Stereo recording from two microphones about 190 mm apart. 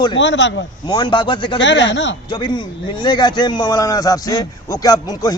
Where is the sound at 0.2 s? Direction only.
70° left (ahead or behind).